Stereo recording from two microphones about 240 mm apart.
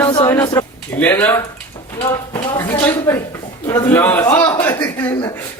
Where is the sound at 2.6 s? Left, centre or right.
Centre.